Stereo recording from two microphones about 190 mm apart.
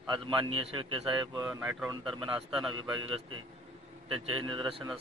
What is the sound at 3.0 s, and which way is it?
Speech, 90° right.